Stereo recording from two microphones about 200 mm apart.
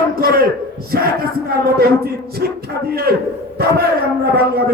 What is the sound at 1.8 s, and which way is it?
A man's voice, 50° right (ahead or behind).